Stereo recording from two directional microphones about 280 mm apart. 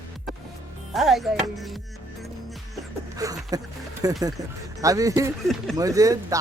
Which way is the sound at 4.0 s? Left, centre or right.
Centre.